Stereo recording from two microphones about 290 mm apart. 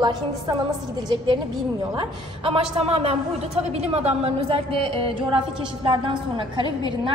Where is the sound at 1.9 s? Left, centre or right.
Centre.